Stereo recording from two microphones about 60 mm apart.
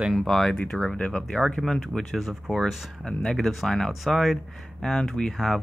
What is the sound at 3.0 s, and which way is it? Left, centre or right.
Speech, centre.